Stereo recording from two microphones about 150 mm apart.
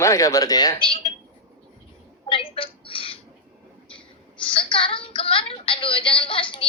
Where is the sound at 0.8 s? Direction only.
35° left (ahead or behind).